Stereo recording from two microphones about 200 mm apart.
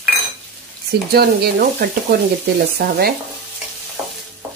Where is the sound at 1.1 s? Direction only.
50° right (ahead or behind).